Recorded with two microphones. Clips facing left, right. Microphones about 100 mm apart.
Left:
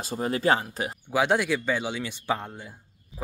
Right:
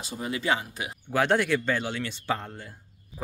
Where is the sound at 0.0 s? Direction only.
45° left (ahead or behind).